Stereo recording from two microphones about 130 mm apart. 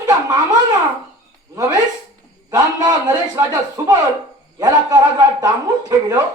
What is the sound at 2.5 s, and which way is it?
A man's voice, 30° right (ahead or behind).